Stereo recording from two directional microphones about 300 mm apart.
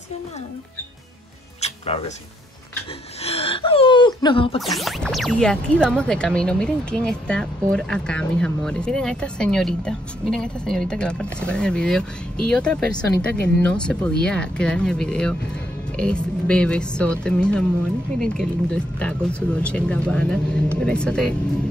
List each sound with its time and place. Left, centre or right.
1.6 s music: left
3.2 s a sound: centre
4.6 s speech: centre